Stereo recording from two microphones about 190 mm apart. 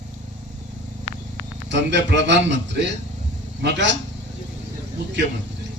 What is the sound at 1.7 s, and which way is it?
Speech, 70° right (ahead or behind).